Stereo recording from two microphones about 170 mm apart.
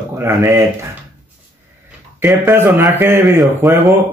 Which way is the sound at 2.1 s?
15° right (ahead or behind).